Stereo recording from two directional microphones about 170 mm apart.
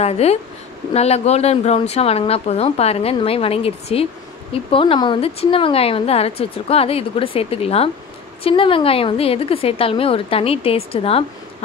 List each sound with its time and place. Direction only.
0.0 s speech: 40° left (ahead or behind)